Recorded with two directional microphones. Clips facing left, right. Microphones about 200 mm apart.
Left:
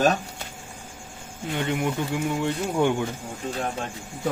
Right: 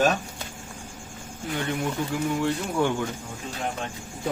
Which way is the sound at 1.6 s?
20° left (ahead or behind).